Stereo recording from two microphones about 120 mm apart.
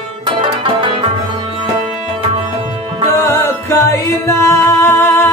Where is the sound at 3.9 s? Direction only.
25° left (ahead or behind).